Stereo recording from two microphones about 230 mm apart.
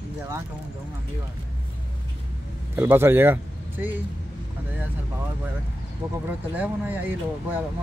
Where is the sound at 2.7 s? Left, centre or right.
Centre.